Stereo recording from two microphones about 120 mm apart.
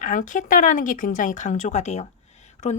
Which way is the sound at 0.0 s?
90° left.